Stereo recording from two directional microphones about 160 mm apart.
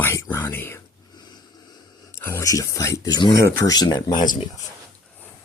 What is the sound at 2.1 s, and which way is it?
Speech, 20° left (ahead or behind).